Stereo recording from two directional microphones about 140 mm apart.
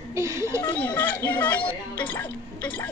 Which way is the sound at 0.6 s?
10° left (ahead or behind).